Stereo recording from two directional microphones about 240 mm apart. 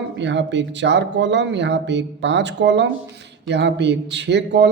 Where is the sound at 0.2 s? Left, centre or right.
Right.